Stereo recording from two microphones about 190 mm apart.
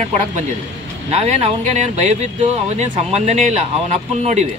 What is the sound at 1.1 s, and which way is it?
Speech, 35° right (ahead or behind).